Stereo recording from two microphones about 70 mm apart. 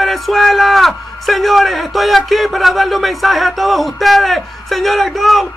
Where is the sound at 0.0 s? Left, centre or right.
Centre.